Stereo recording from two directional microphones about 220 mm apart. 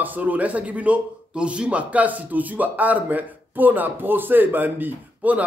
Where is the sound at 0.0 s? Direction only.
10° right (ahead or behind).